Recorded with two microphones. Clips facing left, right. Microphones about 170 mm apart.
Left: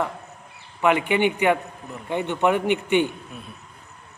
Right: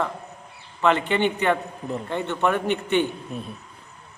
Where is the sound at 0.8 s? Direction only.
10° left (ahead or behind).